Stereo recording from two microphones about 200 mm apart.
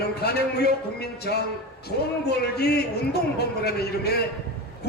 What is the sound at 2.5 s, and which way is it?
Music, 55° left (ahead or behind).